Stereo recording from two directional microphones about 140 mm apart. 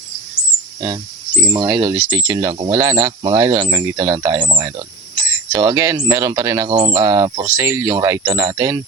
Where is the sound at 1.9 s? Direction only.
25° right (ahead or behind).